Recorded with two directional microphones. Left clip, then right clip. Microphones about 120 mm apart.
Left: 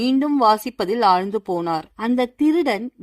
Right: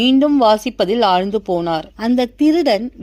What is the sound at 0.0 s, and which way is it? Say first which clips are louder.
A woman's voice: right 5 dB; 15° right (ahead or behind).